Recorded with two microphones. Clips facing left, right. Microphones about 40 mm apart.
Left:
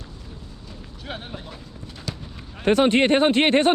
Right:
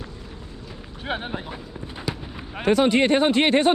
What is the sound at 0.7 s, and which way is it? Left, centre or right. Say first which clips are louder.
Run: right 6 dB; right.